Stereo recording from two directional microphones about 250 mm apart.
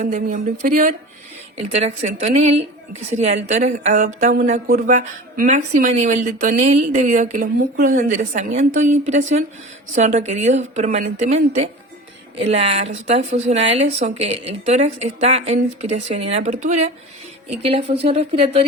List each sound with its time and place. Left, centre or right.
0.0 s speech: right